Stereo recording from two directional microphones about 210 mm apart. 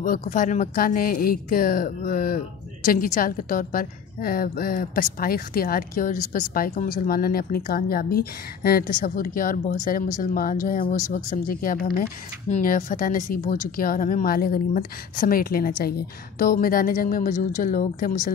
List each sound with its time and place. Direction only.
0.0 s a woman's voice: 40° left (ahead or behind)